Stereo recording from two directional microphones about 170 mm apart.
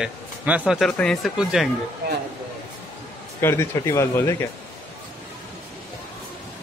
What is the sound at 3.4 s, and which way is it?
Speech, 15° left (ahead or behind).